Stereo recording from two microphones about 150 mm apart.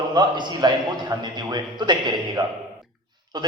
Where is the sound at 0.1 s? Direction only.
30° right (ahead or behind).